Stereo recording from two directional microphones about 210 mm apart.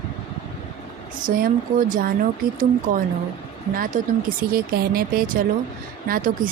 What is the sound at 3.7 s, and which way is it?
Speech, 40° right (ahead or behind).